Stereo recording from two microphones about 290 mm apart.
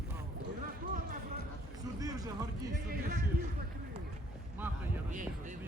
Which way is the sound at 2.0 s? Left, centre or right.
Centre.